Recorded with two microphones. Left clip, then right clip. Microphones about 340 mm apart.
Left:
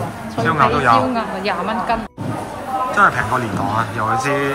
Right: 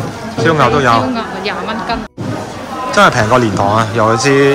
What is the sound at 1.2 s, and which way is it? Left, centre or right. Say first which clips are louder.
Speech: right 2 dB; centre.